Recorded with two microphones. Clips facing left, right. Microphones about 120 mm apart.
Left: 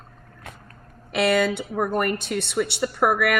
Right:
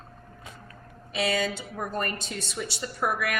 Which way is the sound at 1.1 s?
65° left (ahead or behind).